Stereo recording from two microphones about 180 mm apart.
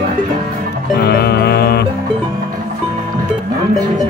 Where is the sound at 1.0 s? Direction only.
60° left (ahead or behind).